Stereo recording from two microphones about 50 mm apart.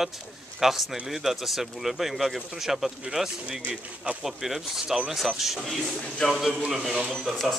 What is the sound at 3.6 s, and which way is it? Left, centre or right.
Speech, right.